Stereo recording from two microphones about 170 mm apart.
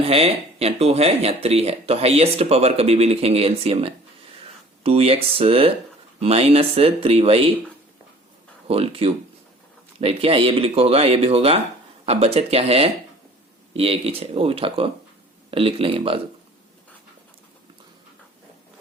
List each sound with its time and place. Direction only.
0.0 s speech: 35° right (ahead or behind)
8.6 s speech: 35° right (ahead or behind)